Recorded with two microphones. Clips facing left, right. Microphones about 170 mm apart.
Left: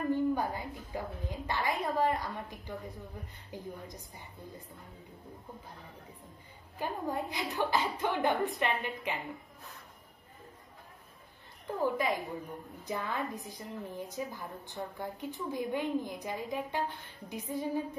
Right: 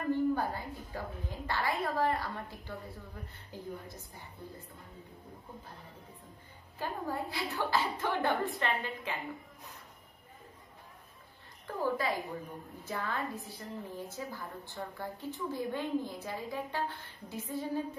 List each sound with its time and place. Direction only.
0.1 s a sound: 15° left (ahead or behind)
3.5 s a woman's voice: 15° left (ahead or behind)
6.8 s a woman's voice: 20° left (ahead or behind)
11.6 s a woman's voice: 20° left (ahead or behind)